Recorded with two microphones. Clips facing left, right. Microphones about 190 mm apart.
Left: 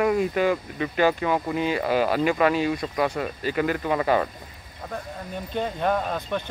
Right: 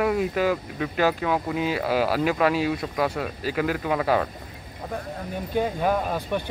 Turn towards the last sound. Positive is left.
turn(degrees=-10)  # may be behind; listen again after turning